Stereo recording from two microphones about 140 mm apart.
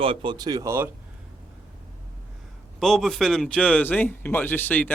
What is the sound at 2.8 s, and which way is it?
Speech, 5° left (ahead or behind).